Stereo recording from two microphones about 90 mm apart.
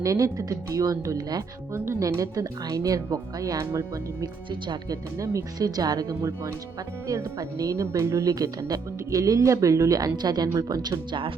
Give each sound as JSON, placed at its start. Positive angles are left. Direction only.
{"t": 0.0, "sound": "speech", "side_deg": -40}
{"t": 4.6, "sound": "speech", "side_deg": -55}
{"t": 5.1, "sound": "speech", "side_deg": -35}